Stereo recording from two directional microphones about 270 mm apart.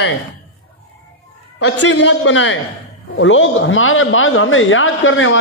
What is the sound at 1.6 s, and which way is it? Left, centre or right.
A man's voice, left.